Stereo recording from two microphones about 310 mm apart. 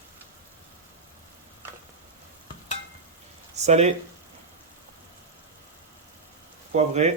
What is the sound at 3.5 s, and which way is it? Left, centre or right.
Speech, right.